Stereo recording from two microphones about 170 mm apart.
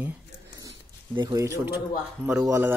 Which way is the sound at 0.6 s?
20° right (ahead or behind).